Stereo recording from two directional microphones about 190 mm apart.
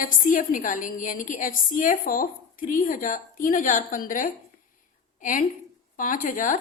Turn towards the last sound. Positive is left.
turn(degrees=45)  # may be behind; listen again after turning